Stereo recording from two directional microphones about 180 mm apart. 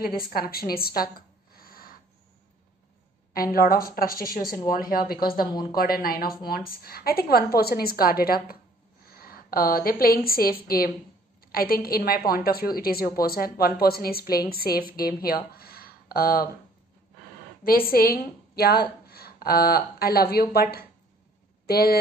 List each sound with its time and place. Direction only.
0.0 s speech: 55° left (ahead or behind)
1.6 s owl: 55° left (ahead or behind)
3.5 s a woman's voice: 55° left (ahead or behind)
5.5 s a woman's voice: 25° left (ahead or behind)
5.8 s a woman's voice: 55° left (ahead or behind)
17.6 s a woman's voice: 55° left (ahead or behind)